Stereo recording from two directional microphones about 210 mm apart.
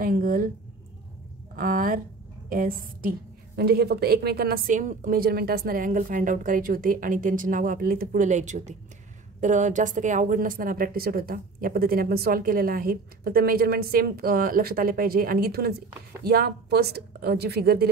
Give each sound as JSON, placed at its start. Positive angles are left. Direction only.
{"t": 0.0, "sound": "a woman's voice", "side_deg": -40}
{"t": 1.6, "sound": "a woman's voice", "side_deg": -40}